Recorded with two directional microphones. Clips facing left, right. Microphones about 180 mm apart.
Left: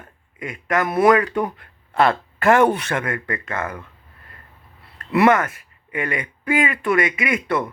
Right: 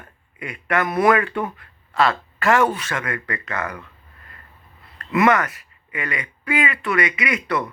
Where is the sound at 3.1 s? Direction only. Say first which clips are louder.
Left 1 dB; 25° left (ahead or behind).